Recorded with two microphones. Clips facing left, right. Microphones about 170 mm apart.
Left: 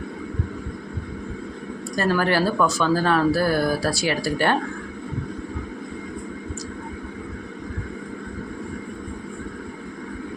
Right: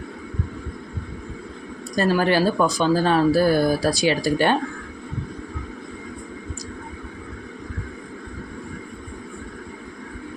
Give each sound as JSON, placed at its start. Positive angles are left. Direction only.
{"t": 2.0, "sound": "speech", "side_deg": -20}